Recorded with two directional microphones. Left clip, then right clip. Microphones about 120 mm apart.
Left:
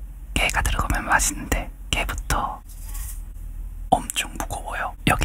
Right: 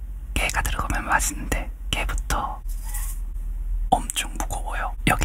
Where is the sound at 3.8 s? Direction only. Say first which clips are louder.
Left 1 dB; centre (ahead or behind).